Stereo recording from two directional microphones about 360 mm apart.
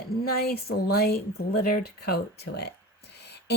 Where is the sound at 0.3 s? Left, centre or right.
Left.